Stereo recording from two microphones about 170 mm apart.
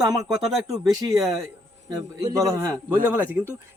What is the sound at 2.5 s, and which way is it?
Speech, 20° right (ahead or behind).